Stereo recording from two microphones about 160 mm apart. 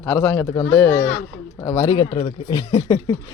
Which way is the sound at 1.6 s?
25° left (ahead or behind).